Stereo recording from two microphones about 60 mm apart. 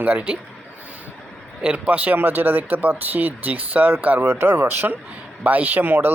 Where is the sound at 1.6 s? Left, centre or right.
Right.